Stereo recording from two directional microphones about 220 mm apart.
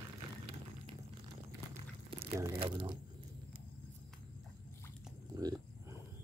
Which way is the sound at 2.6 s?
25° right (ahead or behind).